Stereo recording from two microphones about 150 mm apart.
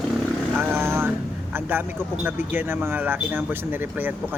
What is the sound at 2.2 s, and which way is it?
Speech, 15° right (ahead or behind).